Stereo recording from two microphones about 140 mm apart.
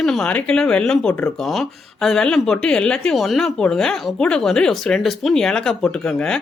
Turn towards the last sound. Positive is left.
turn(degrees=5)  # may be behind; listen again after turning